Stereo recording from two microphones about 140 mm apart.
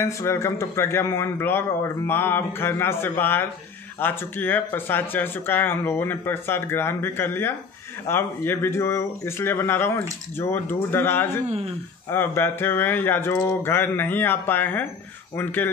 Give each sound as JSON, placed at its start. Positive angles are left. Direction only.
{"t": 0.0, "sound": "speech", "side_deg": 20}
{"t": 11.4, "sound": "speech", "side_deg": -50}
{"t": 12.1, "sound": "speech", "side_deg": 15}